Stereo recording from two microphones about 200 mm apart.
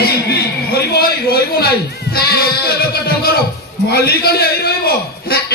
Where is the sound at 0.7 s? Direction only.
50° left (ahead or behind).